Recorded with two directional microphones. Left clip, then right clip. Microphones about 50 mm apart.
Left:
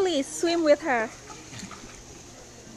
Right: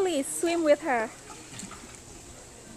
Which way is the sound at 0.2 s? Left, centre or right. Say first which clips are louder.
Left 2 dB; left.